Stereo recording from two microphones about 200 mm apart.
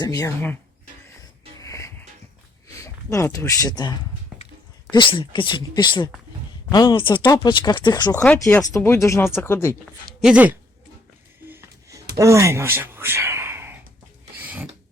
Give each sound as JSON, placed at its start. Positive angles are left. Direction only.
{"t": 0.0, "sound": "speech", "side_deg": 15}
{"t": 1.6, "sound": "music", "side_deg": 15}
{"t": 2.7, "sound": "speech", "side_deg": 15}
{"t": 4.3, "sound": "a sound", "side_deg": -5}
{"t": 4.9, "sound": "speech", "side_deg": 25}
{"t": 8.2, "sound": "speech", "side_deg": 5}
{"t": 10.2, "sound": "speech", "side_deg": -5}
{"t": 11.4, "sound": "a sound", "side_deg": -15}